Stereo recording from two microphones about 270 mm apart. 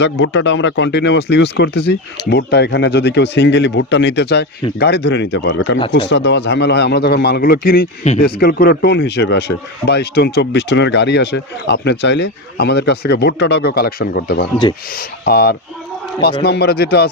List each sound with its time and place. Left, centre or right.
0.0 s speech: left